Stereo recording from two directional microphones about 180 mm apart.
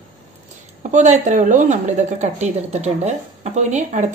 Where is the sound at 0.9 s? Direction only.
40° right (ahead or behind).